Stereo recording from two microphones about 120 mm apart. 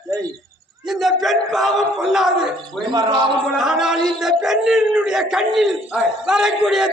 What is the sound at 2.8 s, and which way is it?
Speech, 40° right (ahead or behind).